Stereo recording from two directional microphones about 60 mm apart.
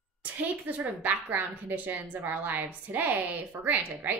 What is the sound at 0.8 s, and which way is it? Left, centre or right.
A woman's voice, right.